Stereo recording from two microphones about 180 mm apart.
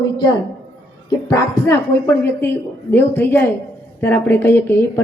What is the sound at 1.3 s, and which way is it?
A woman's voice, 20° left (ahead or behind).